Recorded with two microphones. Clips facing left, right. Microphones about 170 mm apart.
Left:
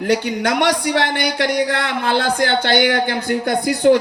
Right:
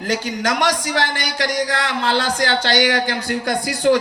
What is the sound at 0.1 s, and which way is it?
Speech, 65° left (ahead or behind).